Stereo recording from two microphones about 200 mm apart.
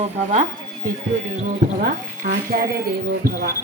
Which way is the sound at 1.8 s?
45° right (ahead or behind).